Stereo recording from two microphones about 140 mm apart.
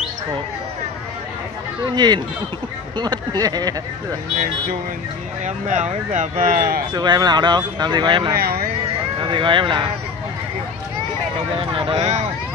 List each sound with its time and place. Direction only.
2.0 s speech: 30° right (ahead or behind)
5.4 s speech: 60° right (ahead or behind)
6.9 s speech: 30° right (ahead or behind)
8.4 s speech: 90° right
8.8 s speech: 35° right (ahead or behind)
11.5 s speech: 40° right (ahead or behind)